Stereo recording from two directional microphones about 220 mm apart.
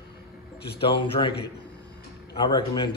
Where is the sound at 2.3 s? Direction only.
20° left (ahead or behind).